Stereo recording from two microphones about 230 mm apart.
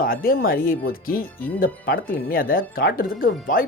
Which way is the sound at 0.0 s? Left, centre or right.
Left.